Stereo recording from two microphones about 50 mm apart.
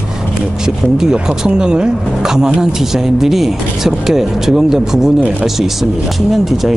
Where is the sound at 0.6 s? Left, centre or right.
Centre.